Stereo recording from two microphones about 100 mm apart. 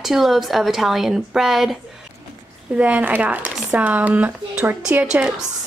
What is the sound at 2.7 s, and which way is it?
Speech, 15° right (ahead or behind).